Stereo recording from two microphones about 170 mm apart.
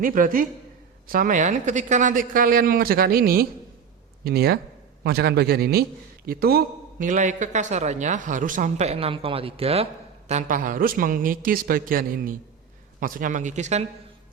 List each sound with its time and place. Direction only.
0.0 s a man's voice: 55° right (ahead or behind)